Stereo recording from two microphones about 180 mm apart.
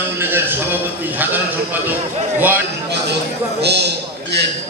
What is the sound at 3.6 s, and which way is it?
Speech, 70° right (ahead or behind).